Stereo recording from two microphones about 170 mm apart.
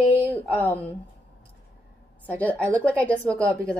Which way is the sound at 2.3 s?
10° left (ahead or behind).